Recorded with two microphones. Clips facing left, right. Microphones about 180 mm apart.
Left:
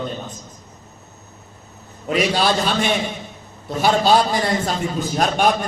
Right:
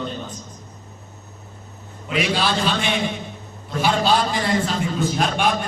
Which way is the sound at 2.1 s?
40° left (ahead or behind).